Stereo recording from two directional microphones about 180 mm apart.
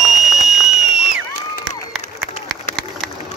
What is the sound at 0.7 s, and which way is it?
Crowd, centre (ahead or behind).